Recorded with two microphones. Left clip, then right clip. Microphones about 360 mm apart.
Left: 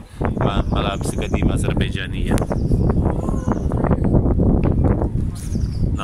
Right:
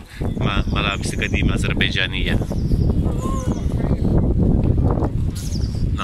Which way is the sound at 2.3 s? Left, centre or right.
Left.